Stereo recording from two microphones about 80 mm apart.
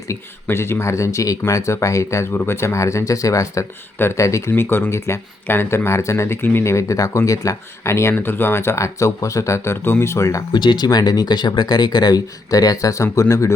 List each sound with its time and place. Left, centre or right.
0.4 s speech: left
3.9 s speech: left
4.2 s speech: left
4.5 s speech: left
10.5 s speech: left
10.8 s speech: left